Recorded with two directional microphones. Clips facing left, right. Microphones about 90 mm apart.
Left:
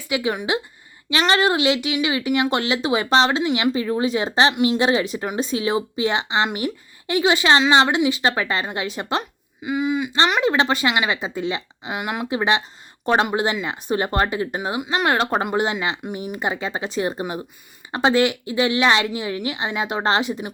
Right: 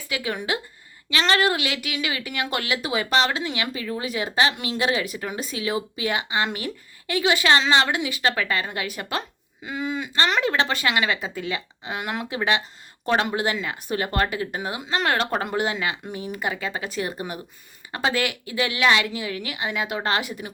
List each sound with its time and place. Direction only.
0.0 s speech: 20° left (ahead or behind)
9.6 s speech: 10° left (ahead or behind)